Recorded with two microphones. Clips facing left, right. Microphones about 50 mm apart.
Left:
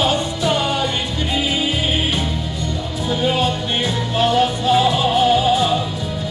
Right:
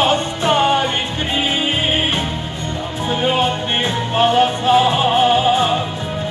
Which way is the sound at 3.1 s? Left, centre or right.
Right.